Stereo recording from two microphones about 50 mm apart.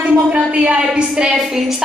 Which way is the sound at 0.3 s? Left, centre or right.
Centre.